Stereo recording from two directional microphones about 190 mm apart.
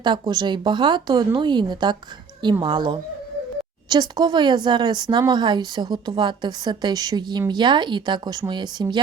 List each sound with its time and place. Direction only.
0.0 s speech: 25° right (ahead or behind)